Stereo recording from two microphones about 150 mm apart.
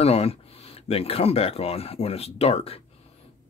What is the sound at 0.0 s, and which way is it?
Speech, 40° left (ahead or behind).